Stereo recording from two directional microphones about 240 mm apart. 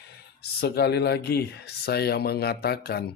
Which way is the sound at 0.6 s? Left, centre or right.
Left.